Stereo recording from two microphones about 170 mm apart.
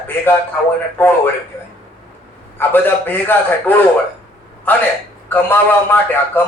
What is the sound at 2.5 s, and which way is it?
A man's voice, 10° left (ahead or behind).